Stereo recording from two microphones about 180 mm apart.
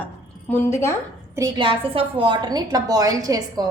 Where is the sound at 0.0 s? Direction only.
10° left (ahead or behind).